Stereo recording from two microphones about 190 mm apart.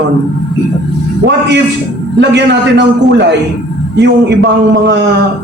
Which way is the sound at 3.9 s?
70° right (ahead or behind).